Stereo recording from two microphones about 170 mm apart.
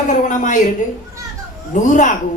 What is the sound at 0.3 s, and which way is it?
Speech, 50° left (ahead or behind).